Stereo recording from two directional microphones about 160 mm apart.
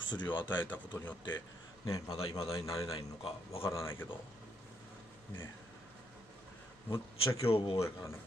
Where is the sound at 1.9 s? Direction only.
20° left (ahead or behind).